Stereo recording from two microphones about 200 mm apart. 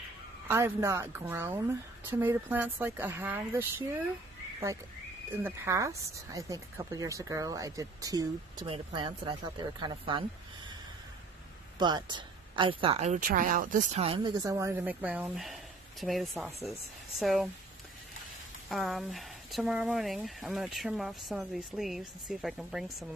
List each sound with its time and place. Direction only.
0.5 s speech: 10° right (ahead or behind)
5.3 s speech: 10° right (ahead or behind)
11.8 s speech: 20° right (ahead or behind)
14.4 s speech: 15° right (ahead or behind)
18.7 s speech: centre (ahead or behind)